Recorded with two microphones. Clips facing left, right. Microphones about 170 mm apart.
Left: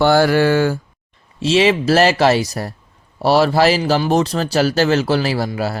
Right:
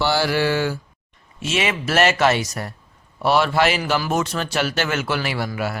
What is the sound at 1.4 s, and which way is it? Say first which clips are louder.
A man's voice: left 9 dB; 30° left (ahead or behind).